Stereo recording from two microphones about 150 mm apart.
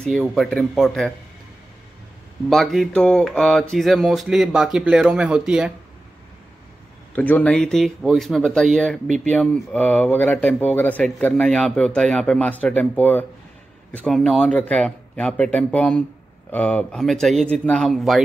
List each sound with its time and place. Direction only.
0.2 s speech: centre (ahead or behind)
2.5 s speech: centre (ahead or behind)
7.2 s speech: 10° left (ahead or behind)